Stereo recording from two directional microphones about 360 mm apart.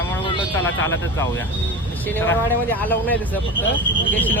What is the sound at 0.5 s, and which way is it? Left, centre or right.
Speech, centre.